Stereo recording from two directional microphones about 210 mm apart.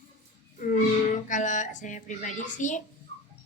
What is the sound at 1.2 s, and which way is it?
A woman's voice, 35° left (ahead or behind).